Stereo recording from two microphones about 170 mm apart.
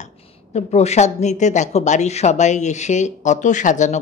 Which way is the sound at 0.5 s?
40° left (ahead or behind).